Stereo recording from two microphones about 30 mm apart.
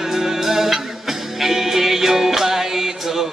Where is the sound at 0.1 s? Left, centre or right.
Centre.